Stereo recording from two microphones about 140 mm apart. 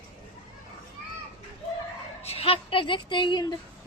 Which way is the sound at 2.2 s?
45° left (ahead or behind).